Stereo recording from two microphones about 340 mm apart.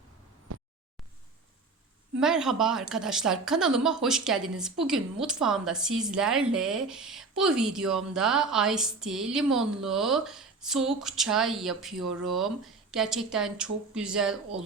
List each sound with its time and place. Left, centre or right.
2.2 s speech: centre